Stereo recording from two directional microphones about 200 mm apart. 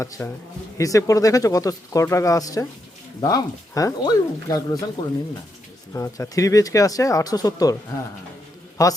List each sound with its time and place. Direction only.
0.0 s speech: 15° left (ahead or behind)
8.8 s speech: 15° left (ahead or behind)